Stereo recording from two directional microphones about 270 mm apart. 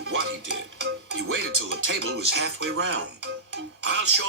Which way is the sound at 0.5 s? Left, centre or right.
Right.